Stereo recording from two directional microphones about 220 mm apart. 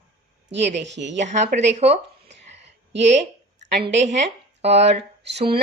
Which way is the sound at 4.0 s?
30° right (ahead or behind).